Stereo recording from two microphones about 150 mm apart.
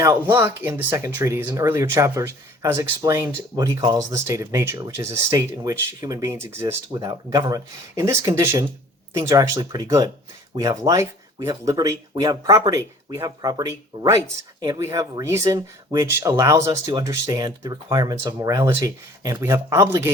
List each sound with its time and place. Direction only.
0.3 s speech: 15° right (ahead or behind)